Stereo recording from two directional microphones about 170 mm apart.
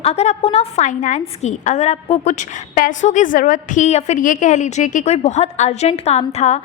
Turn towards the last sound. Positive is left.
turn(degrees=40)  # may be behind; listen again after turning